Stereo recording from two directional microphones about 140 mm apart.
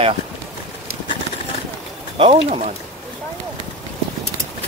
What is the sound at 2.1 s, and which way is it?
Speech, 40° right (ahead or behind).